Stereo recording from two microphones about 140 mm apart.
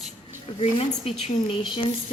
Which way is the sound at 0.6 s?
45° left (ahead or behind).